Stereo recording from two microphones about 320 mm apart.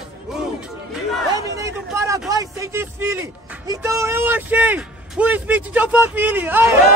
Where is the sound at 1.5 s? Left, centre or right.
Centre.